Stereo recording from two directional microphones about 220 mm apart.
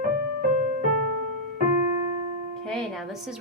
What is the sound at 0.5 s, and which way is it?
Music, 35° right (ahead or behind).